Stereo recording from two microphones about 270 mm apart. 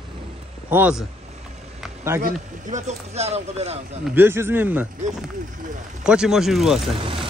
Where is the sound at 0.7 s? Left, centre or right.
Centre.